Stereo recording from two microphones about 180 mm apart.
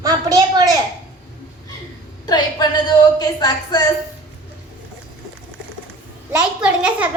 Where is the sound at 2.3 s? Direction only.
20° left (ahead or behind).